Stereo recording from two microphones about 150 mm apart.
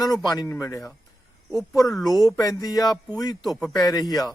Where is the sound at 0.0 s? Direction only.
25° left (ahead or behind).